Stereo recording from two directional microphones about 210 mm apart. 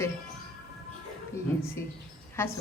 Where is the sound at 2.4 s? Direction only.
10° left (ahead or behind).